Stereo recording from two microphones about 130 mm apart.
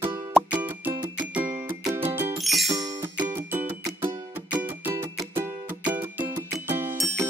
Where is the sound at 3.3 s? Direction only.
15° right (ahead or behind).